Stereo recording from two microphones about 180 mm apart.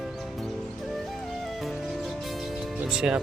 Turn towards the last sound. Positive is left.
turn(degrees=-5)  # may be behind; listen again after turning